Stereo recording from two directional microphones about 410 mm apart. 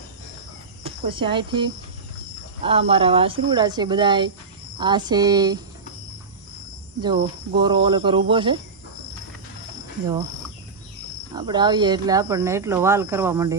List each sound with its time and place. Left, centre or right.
0.9 s speech: centre
7.0 s speech: centre
11.3 s speech: centre